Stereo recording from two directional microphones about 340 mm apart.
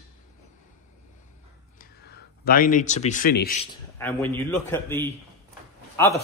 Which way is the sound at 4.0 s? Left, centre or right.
Centre.